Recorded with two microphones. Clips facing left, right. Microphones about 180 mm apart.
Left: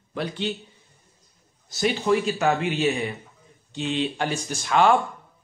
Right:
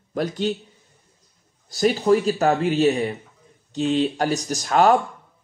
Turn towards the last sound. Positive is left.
turn(degrees=-40)  # may be behind; listen again after turning